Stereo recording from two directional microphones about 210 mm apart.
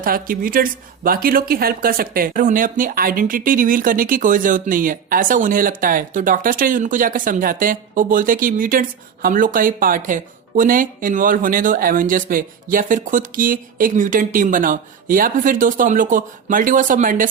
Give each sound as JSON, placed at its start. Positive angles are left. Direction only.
{"t": 0.0, "sound": "speech", "side_deg": -45}